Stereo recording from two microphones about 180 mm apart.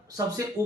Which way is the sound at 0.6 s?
20° right (ahead or behind).